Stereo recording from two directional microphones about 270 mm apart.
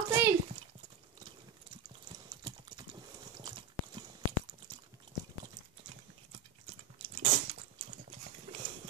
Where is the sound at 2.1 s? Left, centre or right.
Centre.